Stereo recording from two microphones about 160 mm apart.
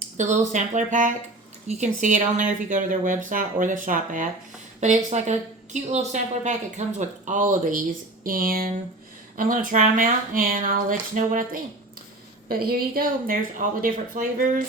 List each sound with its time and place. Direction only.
0.2 s a woman's voice: 50° right (ahead or behind); by 8.7 s 65° right (ahead or behind)
9.7 s speech: 55° right (ahead or behind)
12.5 s speech: 70° right (ahead or behind)